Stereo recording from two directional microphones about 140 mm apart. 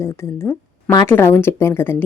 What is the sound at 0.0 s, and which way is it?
Speech, 20° left (ahead or behind).